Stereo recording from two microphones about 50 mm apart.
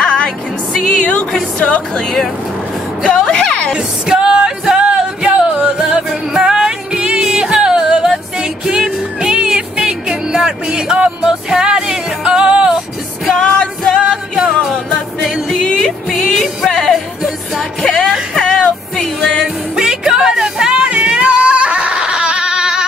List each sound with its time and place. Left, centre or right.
0.0 s music: centre
3.0 s a woman's voice: centre
3.7 s music: centre
13.3 s music: centre
14.0 s music: centre
15.6 s music: centre
16.1 s music: centre
18.4 s music: centre
19.4 s music: centre